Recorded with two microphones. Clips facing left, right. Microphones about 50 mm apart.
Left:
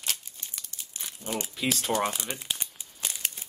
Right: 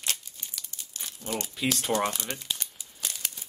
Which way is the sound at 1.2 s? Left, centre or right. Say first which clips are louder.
Even; centre.